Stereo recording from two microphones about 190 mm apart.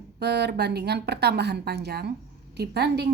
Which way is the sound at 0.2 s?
60° right (ahead or behind).